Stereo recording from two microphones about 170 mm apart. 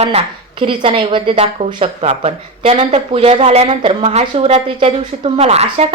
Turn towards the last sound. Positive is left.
turn(degrees=-40)  # may be behind; listen again after turning